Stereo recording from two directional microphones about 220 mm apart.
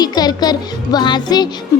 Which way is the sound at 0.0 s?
20° left (ahead or behind).